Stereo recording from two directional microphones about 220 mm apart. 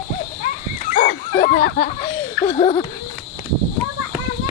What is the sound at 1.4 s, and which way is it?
Speech, 40° left (ahead or behind).